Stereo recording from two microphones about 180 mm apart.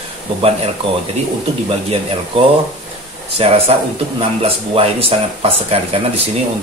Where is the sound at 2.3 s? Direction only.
30° right (ahead or behind).